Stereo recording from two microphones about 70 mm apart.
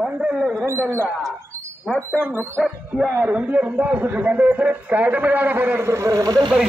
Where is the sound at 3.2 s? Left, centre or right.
Centre.